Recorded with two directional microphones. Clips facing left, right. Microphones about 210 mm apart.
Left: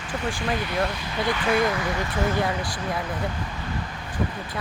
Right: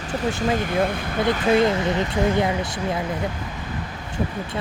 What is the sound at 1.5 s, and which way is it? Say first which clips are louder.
Speech: right 5 dB; 25° right (ahead or behind).